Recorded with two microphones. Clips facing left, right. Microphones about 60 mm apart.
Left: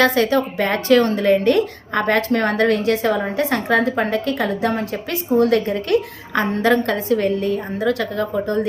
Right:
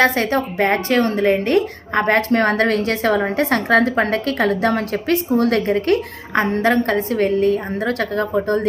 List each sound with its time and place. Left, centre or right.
0.0 s a woman's voice: right
2.4 s a woman's voice: right